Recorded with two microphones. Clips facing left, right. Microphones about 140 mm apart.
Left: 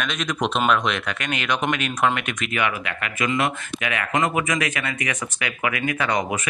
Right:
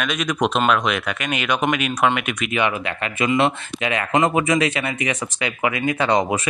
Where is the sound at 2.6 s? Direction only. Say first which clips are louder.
Right 3 dB; 25° right (ahead or behind).